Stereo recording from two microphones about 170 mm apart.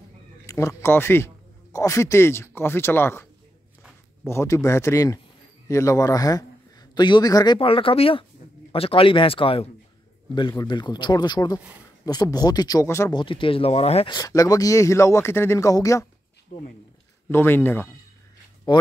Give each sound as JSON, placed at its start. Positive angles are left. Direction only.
{"t": 0.5, "sound": "speech", "side_deg": 15}
{"t": 4.3, "sound": "speech", "side_deg": 15}
{"t": 13.1, "sound": "speech", "side_deg": 30}
{"t": 14.1, "sound": "speech", "side_deg": 20}
{"t": 16.5, "sound": "speech", "side_deg": 60}
{"t": 17.3, "sound": "speech", "side_deg": 10}
{"t": 18.7, "sound": "speech", "side_deg": 25}